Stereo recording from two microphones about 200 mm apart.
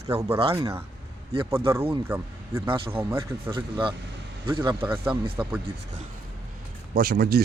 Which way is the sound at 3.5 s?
25° right (ahead or behind).